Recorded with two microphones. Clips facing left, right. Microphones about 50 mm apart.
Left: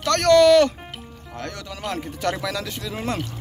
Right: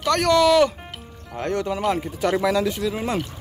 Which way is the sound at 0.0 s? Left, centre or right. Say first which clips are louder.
Left 3 dB; centre.